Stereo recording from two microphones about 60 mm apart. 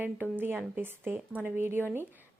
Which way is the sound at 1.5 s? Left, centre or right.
Right.